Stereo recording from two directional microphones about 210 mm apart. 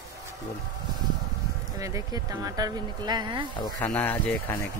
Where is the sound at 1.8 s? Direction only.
15° right (ahead or behind).